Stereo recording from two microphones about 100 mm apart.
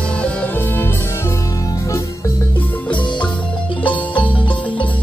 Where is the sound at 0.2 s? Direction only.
15° left (ahead or behind).